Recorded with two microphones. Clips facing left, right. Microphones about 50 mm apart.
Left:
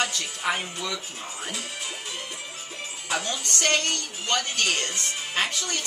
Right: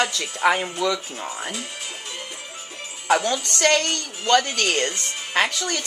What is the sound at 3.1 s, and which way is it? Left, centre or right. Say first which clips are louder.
A woman's voice: right 9 dB; right.